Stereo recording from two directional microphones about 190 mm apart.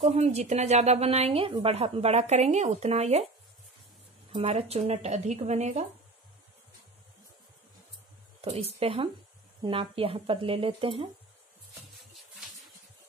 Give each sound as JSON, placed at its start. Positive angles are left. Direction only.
{"t": 0.0, "sound": "a woman's voice", "side_deg": -35}
{"t": 4.3, "sound": "a woman's voice", "side_deg": -30}
{"t": 8.4, "sound": "speech", "side_deg": -30}